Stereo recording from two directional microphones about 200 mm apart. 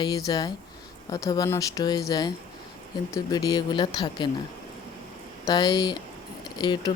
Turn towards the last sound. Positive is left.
turn(degrees=20)  # may be behind; listen again after turning